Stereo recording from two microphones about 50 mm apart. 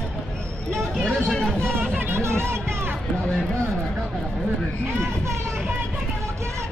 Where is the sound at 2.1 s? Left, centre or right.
Right.